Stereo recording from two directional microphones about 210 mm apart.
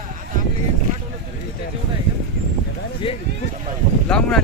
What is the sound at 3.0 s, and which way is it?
Speech, 25° left (ahead or behind).